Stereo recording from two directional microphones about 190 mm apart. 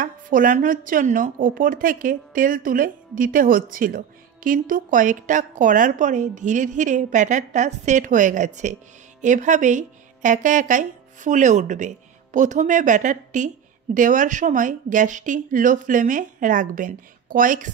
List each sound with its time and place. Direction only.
0.0 s a woman's voice: 45° right (ahead or behind)